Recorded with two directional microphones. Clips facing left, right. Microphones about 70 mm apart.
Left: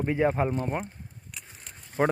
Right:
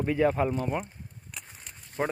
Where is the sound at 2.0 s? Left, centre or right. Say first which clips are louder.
Left 5 dB; left.